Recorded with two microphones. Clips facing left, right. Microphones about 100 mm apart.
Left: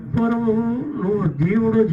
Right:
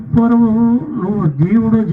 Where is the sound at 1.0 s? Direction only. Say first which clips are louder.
Right 4 dB; 25° right (ahead or behind).